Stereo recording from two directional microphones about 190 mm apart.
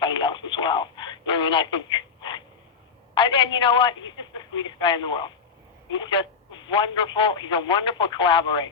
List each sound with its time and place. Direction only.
0.0 s radio: 25° left (ahead or behind)
3.2 s speech: 25° left (ahead or behind)